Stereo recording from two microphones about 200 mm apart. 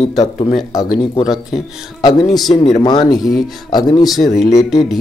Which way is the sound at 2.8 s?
20° left (ahead or behind).